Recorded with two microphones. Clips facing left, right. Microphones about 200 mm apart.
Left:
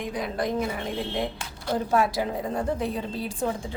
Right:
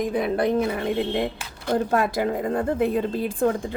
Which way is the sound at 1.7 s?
55° right (ahead or behind).